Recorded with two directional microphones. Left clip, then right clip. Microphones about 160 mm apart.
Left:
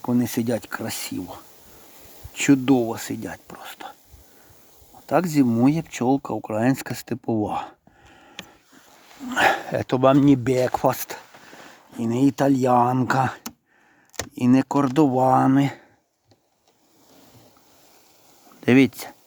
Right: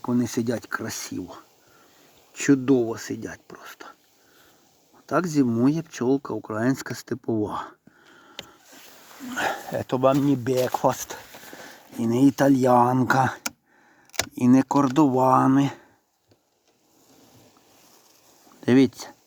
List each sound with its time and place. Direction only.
0.0 s speech: 15° left (ahead or behind)
5.0 s speech: 20° left (ahead or behind)
9.3 s dog: 40° left (ahead or behind)
9.7 s speech: 25° left (ahead or behind)
11.9 s speech: centre (ahead or behind)
18.6 s speech: 15° left (ahead or behind)